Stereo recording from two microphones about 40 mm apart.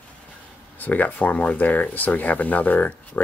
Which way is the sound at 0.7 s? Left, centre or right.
Left.